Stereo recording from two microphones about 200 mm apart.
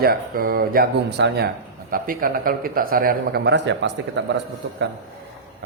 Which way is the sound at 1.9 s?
45° right (ahead or behind).